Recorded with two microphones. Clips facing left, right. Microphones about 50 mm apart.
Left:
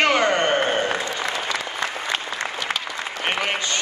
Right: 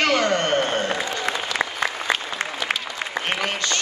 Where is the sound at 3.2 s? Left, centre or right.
Centre.